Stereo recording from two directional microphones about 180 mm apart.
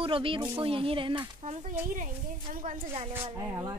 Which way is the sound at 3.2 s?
20° right (ahead or behind).